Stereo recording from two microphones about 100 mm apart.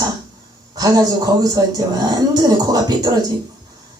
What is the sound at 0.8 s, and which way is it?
Speech, 40° right (ahead or behind).